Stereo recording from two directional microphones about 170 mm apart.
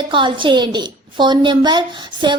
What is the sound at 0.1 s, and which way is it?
A woman's voice, 30° right (ahead or behind).